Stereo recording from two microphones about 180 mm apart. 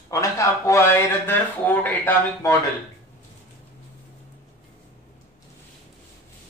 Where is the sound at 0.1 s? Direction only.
15° left (ahead or behind).